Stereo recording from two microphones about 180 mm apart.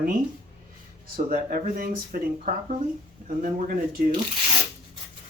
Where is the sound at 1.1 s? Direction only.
50° right (ahead or behind).